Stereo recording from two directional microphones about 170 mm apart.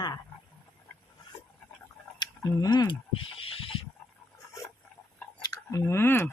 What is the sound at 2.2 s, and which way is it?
Speech, 25° left (ahead or behind).